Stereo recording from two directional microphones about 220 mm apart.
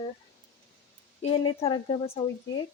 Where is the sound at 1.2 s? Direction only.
25° left (ahead or behind).